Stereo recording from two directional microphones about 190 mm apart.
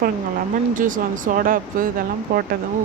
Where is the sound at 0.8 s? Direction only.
45° right (ahead or behind).